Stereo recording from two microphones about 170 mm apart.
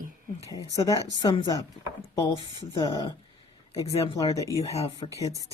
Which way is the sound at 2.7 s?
25° left (ahead or behind).